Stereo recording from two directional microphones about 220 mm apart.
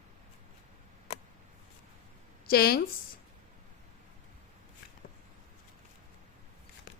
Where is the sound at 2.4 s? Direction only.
45° left (ahead or behind).